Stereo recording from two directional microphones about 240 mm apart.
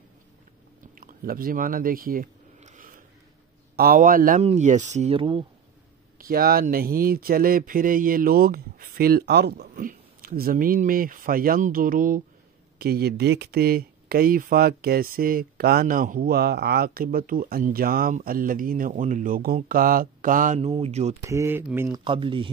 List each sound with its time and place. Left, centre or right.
0.9 s a sound: right
3.7 s speech: right
6.1 s speech: right
21.2 s speech: centre
22.0 s speech: right